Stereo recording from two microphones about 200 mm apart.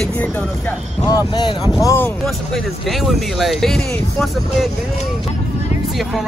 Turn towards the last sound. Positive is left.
turn(degrees=0)  # may be behind; listen again after turning